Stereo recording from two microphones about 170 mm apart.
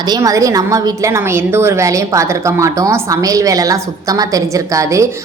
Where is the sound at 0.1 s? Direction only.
20° right (ahead or behind).